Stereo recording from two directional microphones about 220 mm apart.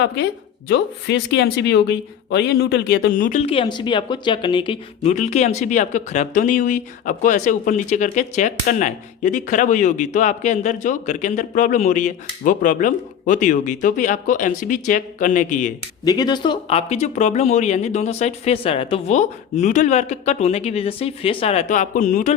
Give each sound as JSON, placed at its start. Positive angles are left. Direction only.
{"t": 0.7, "sound": "speech", "side_deg": 50}
{"t": 16.0, "sound": "speech", "side_deg": 20}